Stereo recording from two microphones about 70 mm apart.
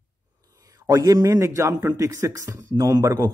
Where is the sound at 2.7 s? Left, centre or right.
Right.